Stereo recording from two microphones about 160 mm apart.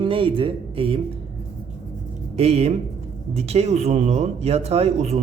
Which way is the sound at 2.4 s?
40° right (ahead or behind).